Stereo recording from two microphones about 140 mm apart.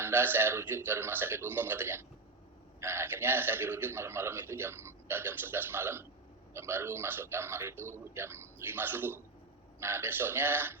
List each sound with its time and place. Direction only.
0.0 s a man's voice: 15° right (ahead or behind)